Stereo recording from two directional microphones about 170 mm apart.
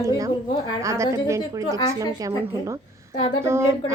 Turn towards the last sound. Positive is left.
turn(degrees=-15)  # may be behind; listen again after turning